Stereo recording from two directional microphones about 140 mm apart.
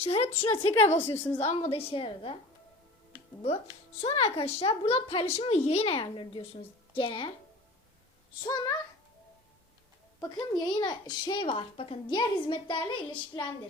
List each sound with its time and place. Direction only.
0.0 s a woman's voice: 45° left (ahead or behind)
0.3 s a woman's voice: 15° left (ahead or behind)
1.5 s speech: 45° left (ahead or behind)
4.0 s a woman's voice: 45° left (ahead or behind)
8.4 s speech: 30° left (ahead or behind)
10.2 s speech: 30° left (ahead or behind)